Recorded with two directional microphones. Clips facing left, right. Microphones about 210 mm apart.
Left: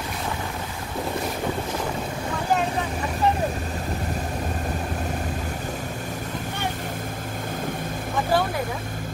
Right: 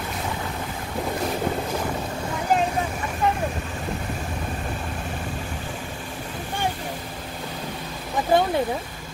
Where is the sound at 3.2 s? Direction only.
35° left (ahead or behind).